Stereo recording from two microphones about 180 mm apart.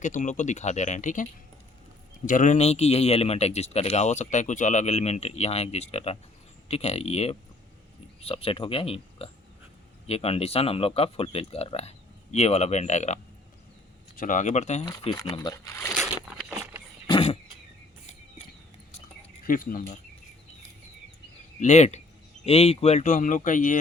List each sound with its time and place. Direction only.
0.0 s speech: 45° left (ahead or behind)
14.2 s speech: 45° left (ahead or behind)
14.8 s speech: 20° left (ahead or behind)
15.9 s vehicle: centre (ahead or behind)
17.1 s vehicle: 30° left (ahead or behind)
19.5 s speech: 50° left (ahead or behind)
21.6 s speech: 40° left (ahead or behind)